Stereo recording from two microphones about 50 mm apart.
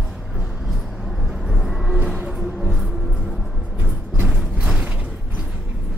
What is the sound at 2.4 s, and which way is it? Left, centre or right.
Music, centre.